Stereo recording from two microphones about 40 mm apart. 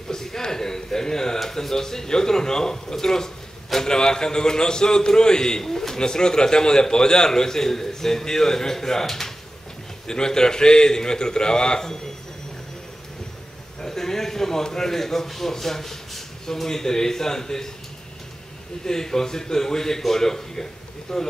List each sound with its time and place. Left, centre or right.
0.1 s a man's voice: centre
13.7 s a man's voice: centre
18.9 s a man's voice: centre